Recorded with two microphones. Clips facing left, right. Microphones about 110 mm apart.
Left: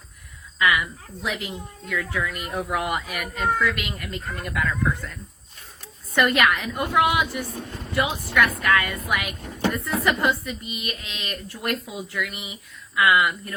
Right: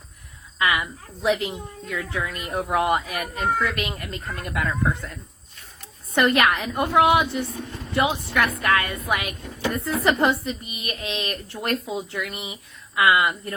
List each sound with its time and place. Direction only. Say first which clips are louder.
0.6 s speech: left 1 dB; 25° right (ahead or behind)
6.1 s speech: right 1 dB; 20° right (ahead or behind)